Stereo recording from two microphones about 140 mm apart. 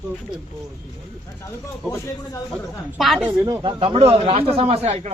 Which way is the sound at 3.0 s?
Centre (ahead or behind).